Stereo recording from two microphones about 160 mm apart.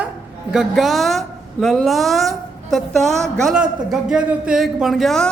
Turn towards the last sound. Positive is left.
turn(degrees=0)  # may be behind; listen again after turning